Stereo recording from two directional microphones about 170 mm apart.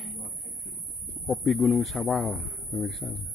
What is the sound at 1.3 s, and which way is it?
A man's voice, centre (ahead or behind).